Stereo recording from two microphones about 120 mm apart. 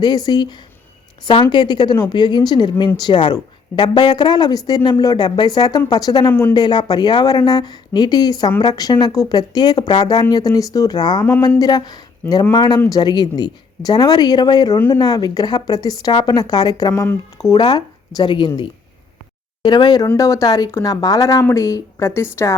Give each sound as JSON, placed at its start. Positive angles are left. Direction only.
{"t": 0.0, "sound": "a woman's voice", "side_deg": 35}